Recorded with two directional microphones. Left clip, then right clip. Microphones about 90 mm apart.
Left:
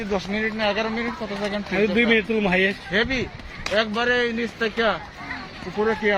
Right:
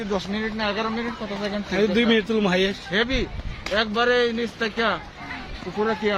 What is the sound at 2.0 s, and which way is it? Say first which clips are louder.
Speech: left 1 dB; 50° right (ahead or behind).